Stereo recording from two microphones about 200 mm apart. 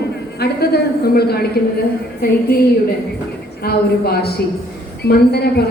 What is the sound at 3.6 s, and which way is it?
A woman's voice, 50° left (ahead or behind).